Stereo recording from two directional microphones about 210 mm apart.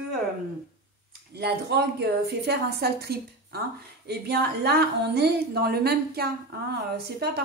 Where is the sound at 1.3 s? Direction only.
50° right (ahead or behind).